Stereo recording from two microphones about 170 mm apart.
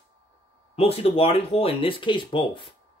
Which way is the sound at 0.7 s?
35° left (ahead or behind).